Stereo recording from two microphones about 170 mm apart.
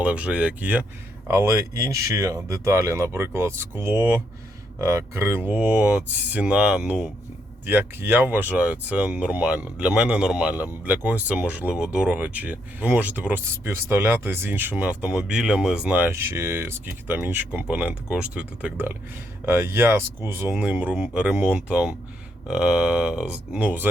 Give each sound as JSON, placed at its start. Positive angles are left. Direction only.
{"t": 0.0, "sound": "speech", "side_deg": -5}